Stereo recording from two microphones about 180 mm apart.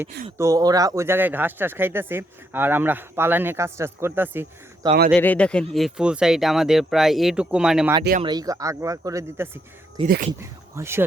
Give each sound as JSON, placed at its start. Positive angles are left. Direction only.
{"t": 0.3, "sound": "speech", "side_deg": -20}
{"t": 5.1, "sound": "speech", "side_deg": 5}
{"t": 8.2, "sound": "speech", "side_deg": -20}
{"t": 10.0, "sound": "speech", "side_deg": -30}
{"t": 10.4, "sound": "speech", "side_deg": -15}